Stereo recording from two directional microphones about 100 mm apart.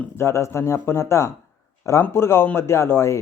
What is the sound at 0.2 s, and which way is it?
Speech, 30° left (ahead or behind).